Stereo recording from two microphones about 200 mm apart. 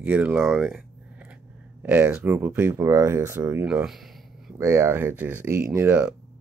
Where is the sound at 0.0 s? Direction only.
5° right (ahead or behind).